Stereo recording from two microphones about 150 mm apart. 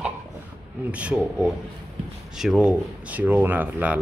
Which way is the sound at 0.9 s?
10° right (ahead or behind).